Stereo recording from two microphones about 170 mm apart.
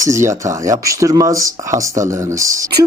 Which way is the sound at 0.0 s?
15° right (ahead or behind).